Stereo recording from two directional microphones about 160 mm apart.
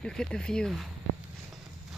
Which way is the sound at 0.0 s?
5° left (ahead or behind).